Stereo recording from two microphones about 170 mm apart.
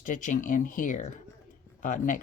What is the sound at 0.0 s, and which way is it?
Speech, 50° left (ahead or behind).